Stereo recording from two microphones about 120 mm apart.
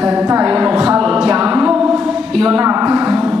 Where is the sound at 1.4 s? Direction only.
10° right (ahead or behind).